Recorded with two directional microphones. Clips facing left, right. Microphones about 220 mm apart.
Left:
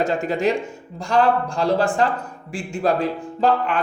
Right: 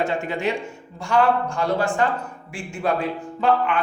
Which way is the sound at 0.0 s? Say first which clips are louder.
Left 3 dB; 40° left (ahead or behind).